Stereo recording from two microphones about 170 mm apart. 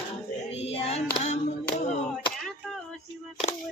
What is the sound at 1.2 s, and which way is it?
Clapping, 40° left (ahead or behind).